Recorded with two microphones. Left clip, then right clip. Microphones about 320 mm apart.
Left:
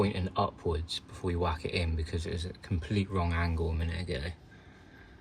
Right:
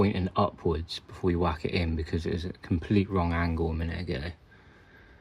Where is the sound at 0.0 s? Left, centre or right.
Centre.